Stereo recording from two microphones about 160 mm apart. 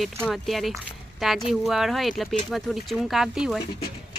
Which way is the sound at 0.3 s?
Centre (ahead or behind).